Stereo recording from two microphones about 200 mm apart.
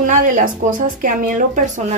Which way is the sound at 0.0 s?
40° right (ahead or behind).